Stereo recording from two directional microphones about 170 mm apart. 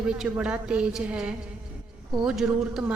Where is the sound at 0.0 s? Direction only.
5° right (ahead or behind).